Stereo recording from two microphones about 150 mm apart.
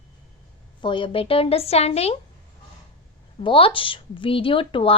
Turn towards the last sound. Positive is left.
turn(degrees=35)  # may be behind; listen again after turning